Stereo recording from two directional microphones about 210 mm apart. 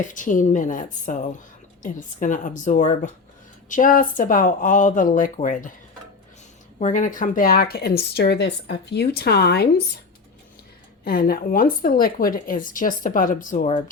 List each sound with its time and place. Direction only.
0.0 s speech: 40° left (ahead or behind)
6.7 s speech: 35° left (ahead or behind)
11.0 s speech: 45° left (ahead or behind)